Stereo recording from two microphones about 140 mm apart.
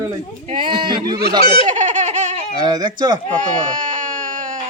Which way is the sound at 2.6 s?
30° right (ahead or behind).